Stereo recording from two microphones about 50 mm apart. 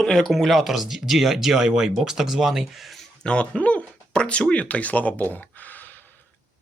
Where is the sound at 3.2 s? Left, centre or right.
Left.